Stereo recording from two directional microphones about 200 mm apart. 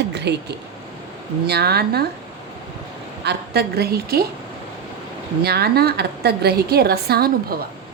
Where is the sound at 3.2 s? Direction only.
55° right (ahead or behind).